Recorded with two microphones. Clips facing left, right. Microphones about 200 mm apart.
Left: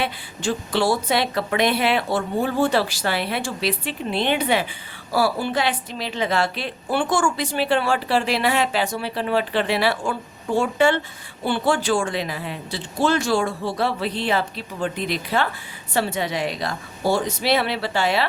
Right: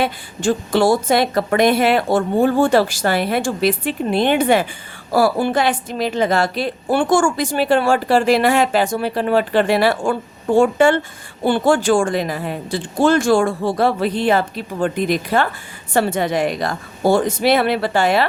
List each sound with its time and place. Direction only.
0.0 s a woman's voice: 45° right (ahead or behind)